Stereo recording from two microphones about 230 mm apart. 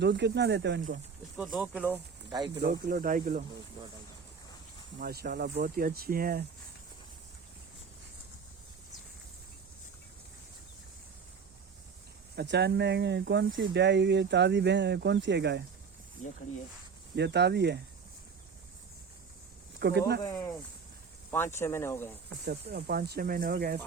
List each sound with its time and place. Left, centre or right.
0.0 s speech: right
1.4 s speech: centre
2.6 s speech: right
4.9 s speech: right
12.4 s speech: right
16.2 s speech: left
17.2 s speech: right
19.8 s speech: right
21.2 s speech: centre
22.4 s speech: right